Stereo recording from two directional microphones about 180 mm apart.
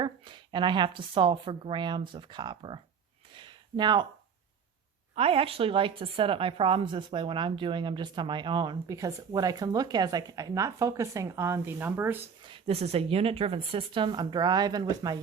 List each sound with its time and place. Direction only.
0.0 s a woman's voice: 25° right (ahead or behind)
3.3 s a sound: 25° right (ahead or behind)
5.1 s a woman's voice: 30° right (ahead or behind); by 12.2 s 10° right (ahead or behind)
12.4 s a woman's voice: 30° right (ahead or behind)